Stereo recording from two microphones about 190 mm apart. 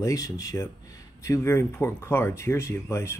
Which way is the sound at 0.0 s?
15° left (ahead or behind).